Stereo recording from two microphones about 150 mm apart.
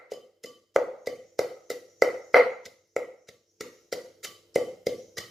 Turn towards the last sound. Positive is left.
turn(degrees=0)  # may be behind; listen again after turning